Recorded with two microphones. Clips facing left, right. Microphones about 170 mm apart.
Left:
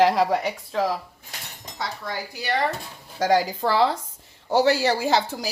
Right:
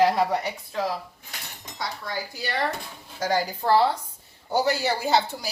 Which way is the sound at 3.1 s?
90° left.